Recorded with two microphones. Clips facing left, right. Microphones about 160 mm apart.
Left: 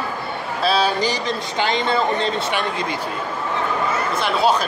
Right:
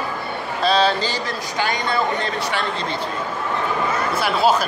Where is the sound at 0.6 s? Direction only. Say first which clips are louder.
Right 1 dB; 10° left (ahead or behind).